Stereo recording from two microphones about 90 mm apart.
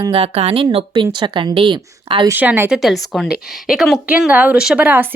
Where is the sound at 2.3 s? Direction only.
20° right (ahead or behind).